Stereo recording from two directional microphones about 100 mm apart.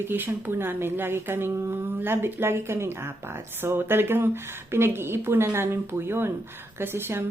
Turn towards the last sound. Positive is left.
turn(degrees=-25)  # may be behind; listen again after turning